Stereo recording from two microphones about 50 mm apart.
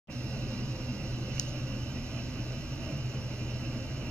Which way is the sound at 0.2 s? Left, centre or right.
Left.